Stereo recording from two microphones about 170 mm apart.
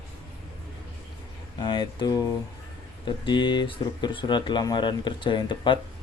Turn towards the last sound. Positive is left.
turn(degrees=30)  # may be behind; listen again after turning